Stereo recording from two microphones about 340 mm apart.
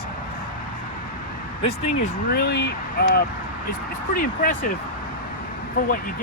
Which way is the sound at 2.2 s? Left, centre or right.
Left.